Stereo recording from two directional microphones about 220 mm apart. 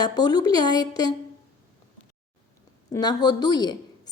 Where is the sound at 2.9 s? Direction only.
20° left (ahead or behind).